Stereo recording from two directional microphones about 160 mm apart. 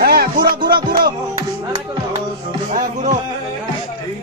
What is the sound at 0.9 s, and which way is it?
Music, 65° right (ahead or behind).